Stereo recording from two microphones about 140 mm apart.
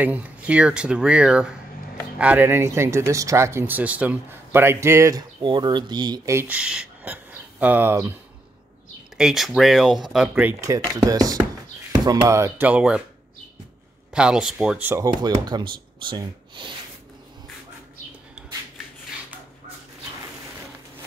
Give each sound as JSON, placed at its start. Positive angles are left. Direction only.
{"t": 0.0, "sound": "speech", "side_deg": -10}
{"t": 5.4, "sound": "speech", "side_deg": -30}
{"t": 6.4, "sound": "speech", "side_deg": -10}
{"t": 9.1, "sound": "speech", "side_deg": 0}
{"t": 10.6, "sound": "speech", "side_deg": -25}
{"t": 14.1, "sound": "speech", "side_deg": -5}
{"t": 14.9, "sound": "speech", "side_deg": -20}
{"t": 15.4, "sound": "speech", "side_deg": -35}